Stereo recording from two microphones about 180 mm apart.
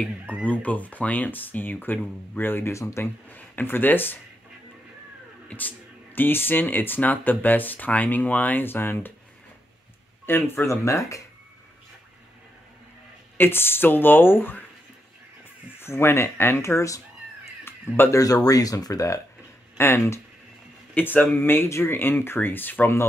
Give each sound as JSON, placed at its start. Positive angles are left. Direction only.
{"t": 0.5, "sound": "speech", "side_deg": 10}
{"t": 5.5, "sound": "speech", "side_deg": 10}
{"t": 10.2, "sound": "speech", "side_deg": 10}
{"t": 13.4, "sound": "speech", "side_deg": 10}
{"t": 15.8, "sound": "speech", "side_deg": 15}